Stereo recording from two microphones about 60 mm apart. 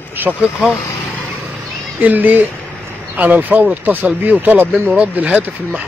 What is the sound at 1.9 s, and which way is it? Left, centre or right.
Speech, right.